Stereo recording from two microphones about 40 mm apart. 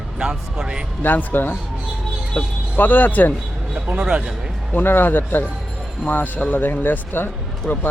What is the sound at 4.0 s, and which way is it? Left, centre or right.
Speech, right.